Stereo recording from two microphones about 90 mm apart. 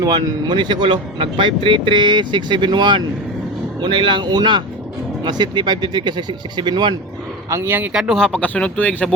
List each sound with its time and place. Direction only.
0.0 s speech: 50° right (ahead or behind)
7.5 s speech: 25° right (ahead or behind)
7.9 s speech: 5° right (ahead or behind)
8.2 s speech: 10° left (ahead or behind)